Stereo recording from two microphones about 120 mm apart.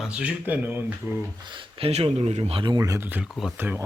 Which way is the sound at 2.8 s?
25° right (ahead or behind).